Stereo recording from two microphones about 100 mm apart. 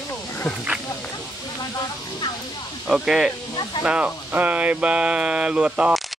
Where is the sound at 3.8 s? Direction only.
10° right (ahead or behind).